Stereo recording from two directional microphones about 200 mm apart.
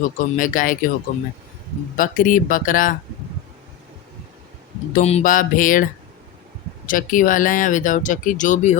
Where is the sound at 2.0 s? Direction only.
40° left (ahead or behind).